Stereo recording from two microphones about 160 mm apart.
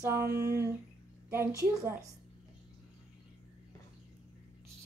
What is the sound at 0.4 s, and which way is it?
Humming, 20° right (ahead or behind).